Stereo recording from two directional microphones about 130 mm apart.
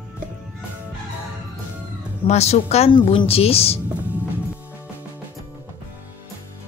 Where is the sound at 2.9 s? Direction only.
40° left (ahead or behind).